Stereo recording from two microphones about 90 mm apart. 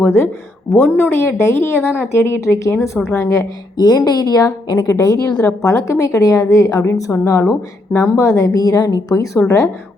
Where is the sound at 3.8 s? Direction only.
50° left (ahead or behind).